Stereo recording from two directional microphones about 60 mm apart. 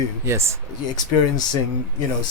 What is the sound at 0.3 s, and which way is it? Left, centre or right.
Speech, right.